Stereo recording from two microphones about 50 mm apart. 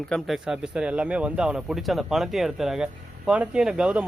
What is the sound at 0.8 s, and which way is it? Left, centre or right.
Speech, right.